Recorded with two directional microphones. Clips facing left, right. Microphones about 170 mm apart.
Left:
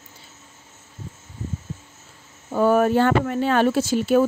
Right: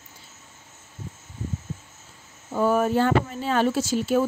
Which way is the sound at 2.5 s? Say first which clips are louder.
Left 4 dB; 65° left (ahead or behind).